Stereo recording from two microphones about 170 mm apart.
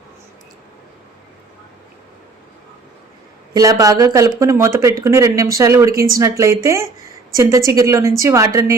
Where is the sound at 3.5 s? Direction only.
20° right (ahead or behind).